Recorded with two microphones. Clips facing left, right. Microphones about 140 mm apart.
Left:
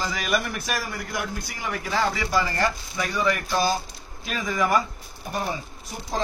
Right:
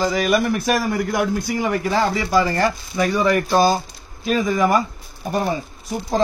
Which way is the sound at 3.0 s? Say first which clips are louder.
Right 7 dB; 45° right (ahead or behind).